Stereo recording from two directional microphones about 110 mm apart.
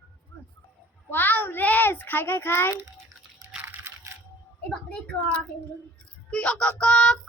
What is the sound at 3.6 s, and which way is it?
Crushing, 20° right (ahead or behind).